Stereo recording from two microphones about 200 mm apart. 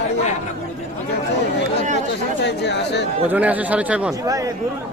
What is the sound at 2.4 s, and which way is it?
Speech, 60° left (ahead or behind).